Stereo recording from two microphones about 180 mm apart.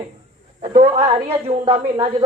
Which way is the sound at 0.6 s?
30° right (ahead or behind).